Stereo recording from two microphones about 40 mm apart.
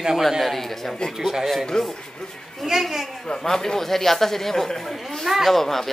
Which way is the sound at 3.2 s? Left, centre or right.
Centre.